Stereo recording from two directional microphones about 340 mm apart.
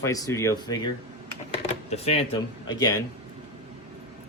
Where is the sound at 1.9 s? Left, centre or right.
Centre.